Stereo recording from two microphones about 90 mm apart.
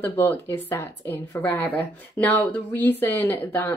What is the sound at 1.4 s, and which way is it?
Speech, 20° left (ahead or behind).